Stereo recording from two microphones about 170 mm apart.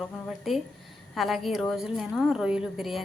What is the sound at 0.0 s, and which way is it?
A woman's voice, centre (ahead or behind).